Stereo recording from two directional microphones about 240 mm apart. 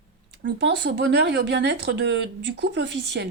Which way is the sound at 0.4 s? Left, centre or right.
Right.